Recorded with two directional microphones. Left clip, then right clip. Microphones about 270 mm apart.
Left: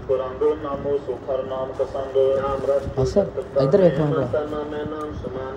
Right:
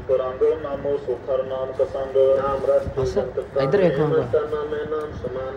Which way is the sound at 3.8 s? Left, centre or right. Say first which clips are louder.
Left 1 dB; centre.